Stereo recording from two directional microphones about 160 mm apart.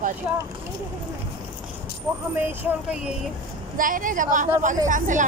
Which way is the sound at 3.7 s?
55° right (ahead or behind).